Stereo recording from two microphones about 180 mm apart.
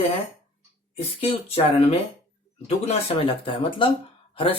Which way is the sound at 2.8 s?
30° left (ahead or behind).